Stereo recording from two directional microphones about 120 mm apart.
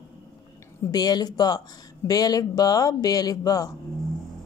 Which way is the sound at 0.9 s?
35° left (ahead or behind).